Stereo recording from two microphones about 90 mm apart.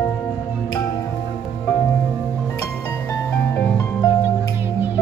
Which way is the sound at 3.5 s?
25° left (ahead or behind).